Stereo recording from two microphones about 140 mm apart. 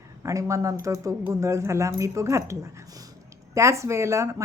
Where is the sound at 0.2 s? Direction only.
20° right (ahead or behind).